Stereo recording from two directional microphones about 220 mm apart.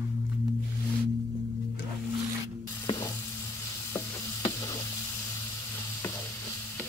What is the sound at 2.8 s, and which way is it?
Stir, 15° left (ahead or behind).